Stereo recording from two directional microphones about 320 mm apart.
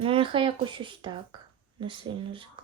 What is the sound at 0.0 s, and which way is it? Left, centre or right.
Speech, centre.